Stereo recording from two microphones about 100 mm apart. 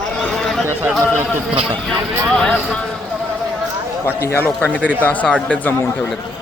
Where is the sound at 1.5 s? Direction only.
60° right (ahead or behind).